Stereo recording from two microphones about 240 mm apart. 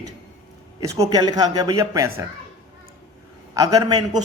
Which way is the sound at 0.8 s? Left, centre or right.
Centre.